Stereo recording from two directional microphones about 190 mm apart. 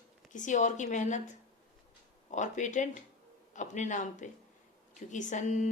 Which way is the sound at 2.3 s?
40° left (ahead or behind).